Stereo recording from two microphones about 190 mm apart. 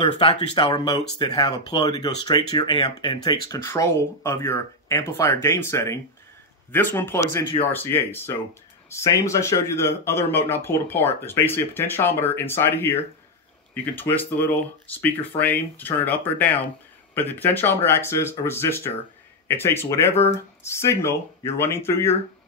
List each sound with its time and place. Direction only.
0.0 s speech: 25° left (ahead or behind)